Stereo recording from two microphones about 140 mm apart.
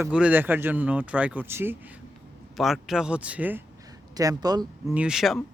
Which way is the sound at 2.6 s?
Centre (ahead or behind).